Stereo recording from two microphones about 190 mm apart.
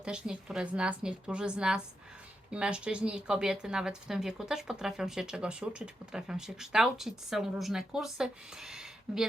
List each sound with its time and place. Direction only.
0.0 s speech: 5° right (ahead or behind)